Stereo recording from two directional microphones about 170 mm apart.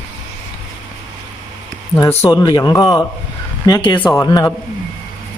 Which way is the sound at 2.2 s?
15° left (ahead or behind).